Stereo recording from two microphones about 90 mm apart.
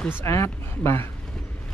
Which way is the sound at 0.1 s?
30° left (ahead or behind).